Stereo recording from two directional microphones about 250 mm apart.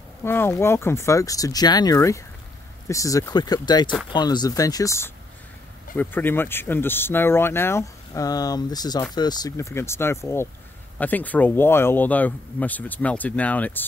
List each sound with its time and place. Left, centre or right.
0.2 s speech: centre